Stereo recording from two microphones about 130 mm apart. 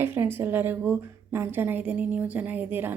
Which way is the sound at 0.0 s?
15° right (ahead or behind).